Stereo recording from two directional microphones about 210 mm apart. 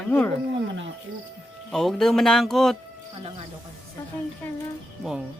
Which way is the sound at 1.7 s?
Centre (ahead or behind).